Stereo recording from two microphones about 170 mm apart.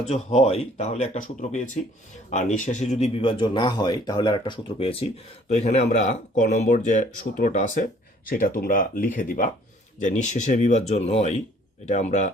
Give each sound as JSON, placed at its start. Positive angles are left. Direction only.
{"t": 0.1, "sound": "speech", "side_deg": 40}